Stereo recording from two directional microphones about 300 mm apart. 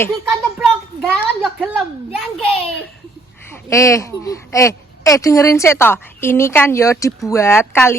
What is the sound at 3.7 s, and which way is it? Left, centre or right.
Speech, centre.